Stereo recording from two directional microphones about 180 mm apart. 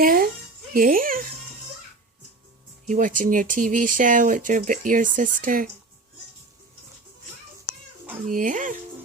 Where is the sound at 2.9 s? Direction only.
45° right (ahead or behind).